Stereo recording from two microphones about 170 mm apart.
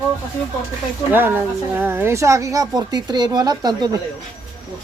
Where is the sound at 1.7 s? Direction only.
10° right (ahead or behind).